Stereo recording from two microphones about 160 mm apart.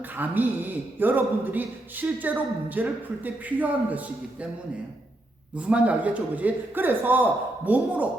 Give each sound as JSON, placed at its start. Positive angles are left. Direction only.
{"t": 0.2, "sound": "a man's voice", "side_deg": -10}
{"t": 5.5, "sound": "a man's voice", "side_deg": -5}